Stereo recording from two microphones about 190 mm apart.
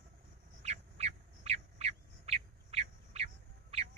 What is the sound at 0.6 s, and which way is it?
Bird, 35° right (ahead or behind).